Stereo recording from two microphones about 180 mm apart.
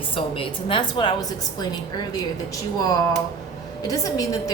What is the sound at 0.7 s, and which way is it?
Speech, 25° left (ahead or behind).